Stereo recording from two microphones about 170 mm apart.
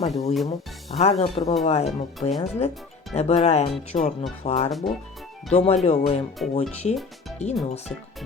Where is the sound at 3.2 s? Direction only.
40° left (ahead or behind).